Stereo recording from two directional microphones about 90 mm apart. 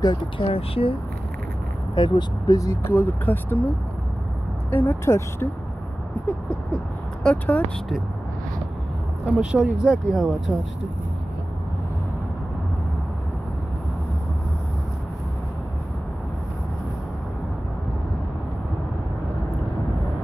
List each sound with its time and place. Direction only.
0.0 s speech: 65° left (ahead or behind); by 0.9 s 90° left
2.0 s speech: 50° left (ahead or behind)
2.8 s speech: 25° left (ahead or behind)
4.6 s speech: 25° left (ahead or behind)
6.2 s a sound: 15° left (ahead or behind)
9.2 s speech: 15° right (ahead or behind)